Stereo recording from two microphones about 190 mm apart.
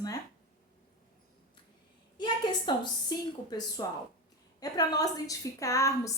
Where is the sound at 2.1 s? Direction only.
25° left (ahead or behind).